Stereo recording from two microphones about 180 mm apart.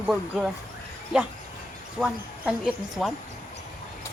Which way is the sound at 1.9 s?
5° right (ahead or behind).